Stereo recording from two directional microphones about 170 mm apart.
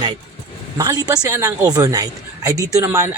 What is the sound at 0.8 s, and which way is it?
A man's voice, 25° right (ahead or behind).